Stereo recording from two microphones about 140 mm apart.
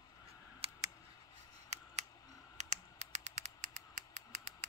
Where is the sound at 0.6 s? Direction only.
45° right (ahead or behind).